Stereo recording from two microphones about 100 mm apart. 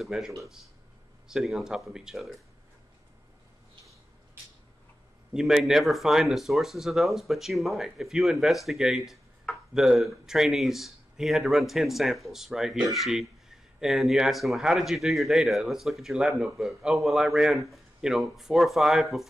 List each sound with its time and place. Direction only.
0.0 s speech: 5° right (ahead or behind)
1.3 s speech: 5° right (ahead or behind)
5.3 s speech: 5° right (ahead or behind)